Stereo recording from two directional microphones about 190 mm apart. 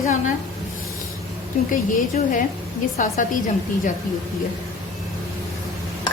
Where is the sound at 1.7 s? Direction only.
45° left (ahead or behind).